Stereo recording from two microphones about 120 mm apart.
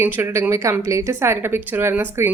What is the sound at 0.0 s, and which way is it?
A woman's voice, 20° right (ahead or behind).